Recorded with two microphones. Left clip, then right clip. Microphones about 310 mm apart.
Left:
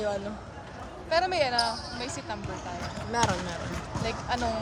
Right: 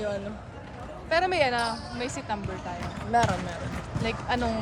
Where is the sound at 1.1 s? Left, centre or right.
Right.